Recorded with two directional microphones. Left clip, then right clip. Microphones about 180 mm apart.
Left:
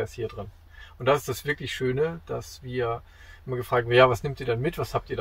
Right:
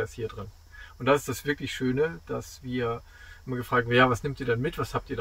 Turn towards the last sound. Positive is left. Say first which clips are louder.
# left 2 dB
turn(degrees=-15)  # may be behind; listen again after turning